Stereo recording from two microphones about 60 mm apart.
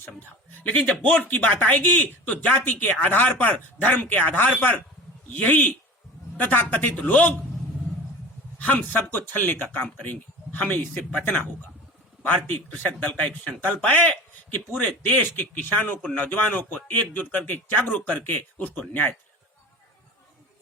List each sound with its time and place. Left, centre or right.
0.6 s speech: left
8.5 s a man's voice: left